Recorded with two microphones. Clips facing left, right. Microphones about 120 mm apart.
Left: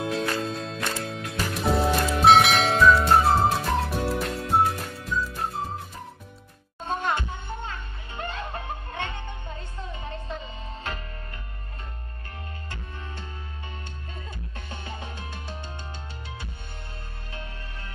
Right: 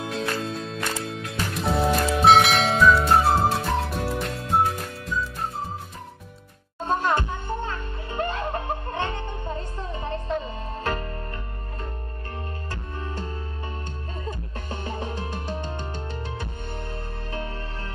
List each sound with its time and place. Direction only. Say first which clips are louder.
0.0 s music: left 1 dB; centre (ahead or behind)
6.9 s music: right 4 dB; 45° right (ahead or behind)
14.2 s music: right 7 dB; 45° right (ahead or behind)